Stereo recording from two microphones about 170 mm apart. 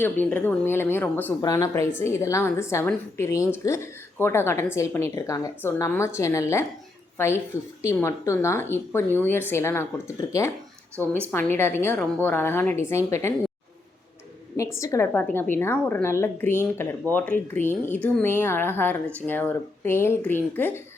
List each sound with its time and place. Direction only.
0.0 s a woman's voice: 10° left (ahead or behind)
14.5 s a woman's voice: 20° left (ahead or behind)